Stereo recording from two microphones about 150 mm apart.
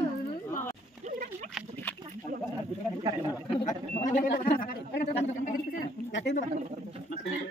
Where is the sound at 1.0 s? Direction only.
50° right (ahead or behind).